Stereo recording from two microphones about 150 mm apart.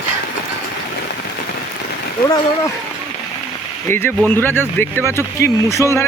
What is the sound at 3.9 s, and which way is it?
Speech, 15° left (ahead or behind).